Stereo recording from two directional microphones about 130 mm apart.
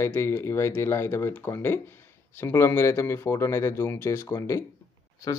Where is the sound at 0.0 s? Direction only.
20° left (ahead or behind).